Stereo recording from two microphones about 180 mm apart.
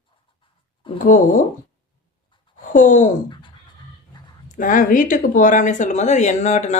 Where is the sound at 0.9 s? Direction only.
50° left (ahead or behind).